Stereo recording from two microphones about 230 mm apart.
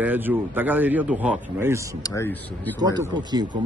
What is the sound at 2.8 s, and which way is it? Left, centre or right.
Speech, centre.